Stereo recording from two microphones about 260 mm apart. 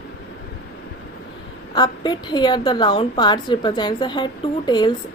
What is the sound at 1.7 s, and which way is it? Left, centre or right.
A woman's voice, centre.